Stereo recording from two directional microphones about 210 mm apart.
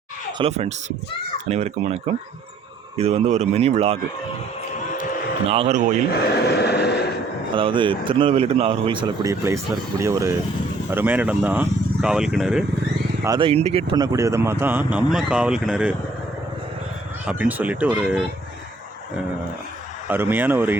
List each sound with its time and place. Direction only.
0.3 s speech: 30° right (ahead or behind)
3.0 s speech: 30° right (ahead or behind)
5.0 s a sound: 45° left (ahead or behind)
5.5 s speech: 30° right (ahead or behind)
6.1 s speech: 50° left (ahead or behind)
7.5 s speech: 25° right (ahead or behind); by 12.6 s 5° right (ahead or behind)
13.2 s speech: 20° right (ahead or behind); by 16.0 s 5° right (ahead or behind)
17.2 s speech: 5° right (ahead or behind)
20.1 s speech: 10° right (ahead or behind)